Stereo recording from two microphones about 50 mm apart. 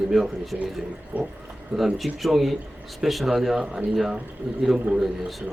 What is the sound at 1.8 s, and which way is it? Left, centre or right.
Speech, centre.